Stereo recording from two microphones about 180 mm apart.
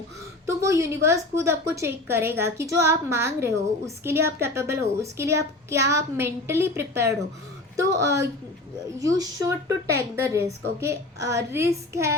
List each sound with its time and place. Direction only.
0.4 s a woman's voice: 15° right (ahead or behind)